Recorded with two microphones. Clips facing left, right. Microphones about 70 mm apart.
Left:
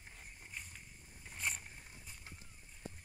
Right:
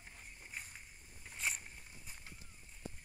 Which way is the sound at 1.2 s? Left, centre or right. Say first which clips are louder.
Even; centre.